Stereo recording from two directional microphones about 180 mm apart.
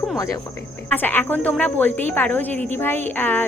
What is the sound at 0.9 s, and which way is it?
A woman's voice, 10° left (ahead or behind).